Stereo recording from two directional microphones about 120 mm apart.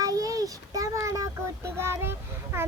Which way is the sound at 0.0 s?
30° right (ahead or behind).